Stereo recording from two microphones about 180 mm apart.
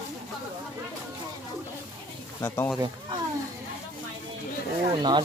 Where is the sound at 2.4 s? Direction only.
15° left (ahead or behind).